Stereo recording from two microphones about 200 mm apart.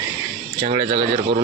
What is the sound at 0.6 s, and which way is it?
Speech, 30° right (ahead or behind).